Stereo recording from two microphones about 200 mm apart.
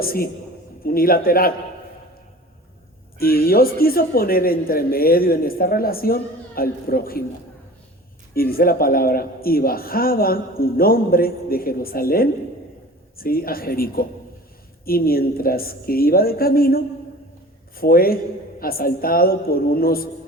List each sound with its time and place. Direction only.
0.0 s speech: 50° left (ahead or behind)
3.2 s speech: 50° left (ahead or behind)
8.3 s speech: 50° left (ahead or behind)